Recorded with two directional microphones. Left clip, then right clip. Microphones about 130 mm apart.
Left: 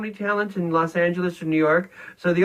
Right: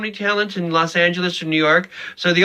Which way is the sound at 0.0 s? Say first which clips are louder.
Right 5 dB; 10° right (ahead or behind).